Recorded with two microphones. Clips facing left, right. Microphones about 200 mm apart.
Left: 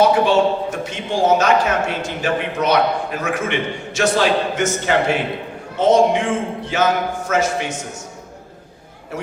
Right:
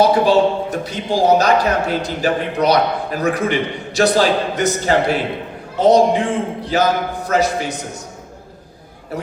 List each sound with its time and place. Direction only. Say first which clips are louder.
0.0 s a man's voice: right 1 dB; 35° right (ahead or behind)